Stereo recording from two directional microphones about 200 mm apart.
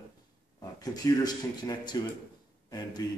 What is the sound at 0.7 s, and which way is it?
Speech, 20° left (ahead or behind).